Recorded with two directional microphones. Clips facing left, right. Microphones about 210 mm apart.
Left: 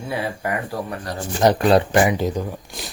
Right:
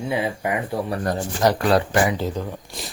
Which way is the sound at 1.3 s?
20° left (ahead or behind).